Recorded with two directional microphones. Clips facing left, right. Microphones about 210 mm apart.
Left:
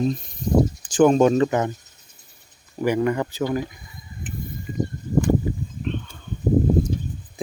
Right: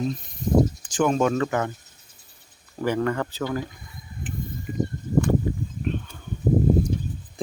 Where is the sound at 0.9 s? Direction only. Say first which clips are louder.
Left 6 dB; 35° left (ahead or behind).